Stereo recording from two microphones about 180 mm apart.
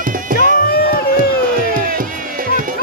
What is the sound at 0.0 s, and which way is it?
Music, 50° right (ahead or behind).